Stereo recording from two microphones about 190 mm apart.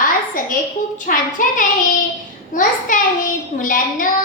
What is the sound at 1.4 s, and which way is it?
A child's voice, 45° left (ahead or behind).